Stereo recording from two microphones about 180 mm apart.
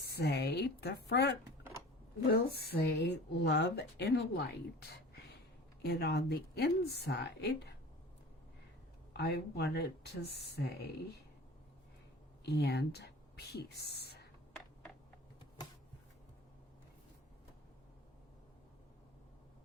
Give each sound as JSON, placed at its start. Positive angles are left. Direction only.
{"t": 0.0, "sound": "a woman's voice", "side_deg": 65}
{"t": 9.1, "sound": "a woman's voice", "side_deg": 65}
{"t": 12.5, "sound": "speech", "side_deg": 65}